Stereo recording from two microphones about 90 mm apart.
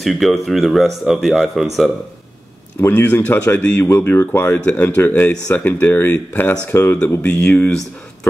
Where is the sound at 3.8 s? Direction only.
30° left (ahead or behind).